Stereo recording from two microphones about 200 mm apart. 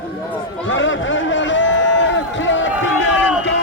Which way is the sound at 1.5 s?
65° left (ahead or behind).